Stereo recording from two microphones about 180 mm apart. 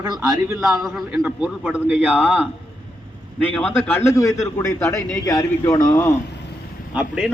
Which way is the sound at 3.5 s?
5° left (ahead or behind).